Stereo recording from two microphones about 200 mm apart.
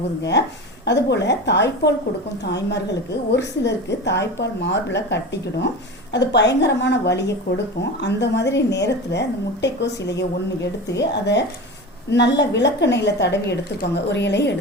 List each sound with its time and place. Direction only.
0.2 s a woman's voice: 60° left (ahead or behind)
3.6 s a woman's voice: 60° left (ahead or behind)